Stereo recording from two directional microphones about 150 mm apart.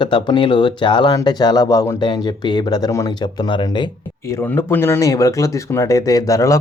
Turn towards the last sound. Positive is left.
turn(degrees=20)  # may be behind; listen again after turning